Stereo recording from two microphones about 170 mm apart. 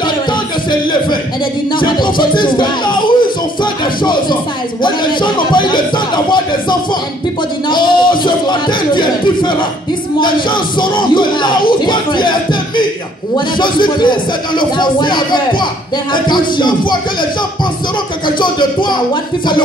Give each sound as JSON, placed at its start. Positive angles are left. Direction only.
{"t": 1.8, "sound": "speech", "side_deg": 25}
{"t": 7.7, "sound": "a sound", "side_deg": 25}
{"t": 10.2, "sound": "speech", "side_deg": 25}
{"t": 18.4, "sound": "speech", "side_deg": 25}